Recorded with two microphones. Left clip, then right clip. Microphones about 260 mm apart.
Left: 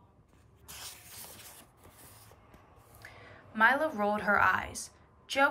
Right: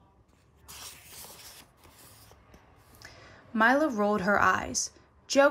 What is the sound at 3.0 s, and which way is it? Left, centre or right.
A woman's voice, centre.